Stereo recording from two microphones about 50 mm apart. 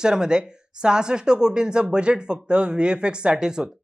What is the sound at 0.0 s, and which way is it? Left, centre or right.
Speech, centre.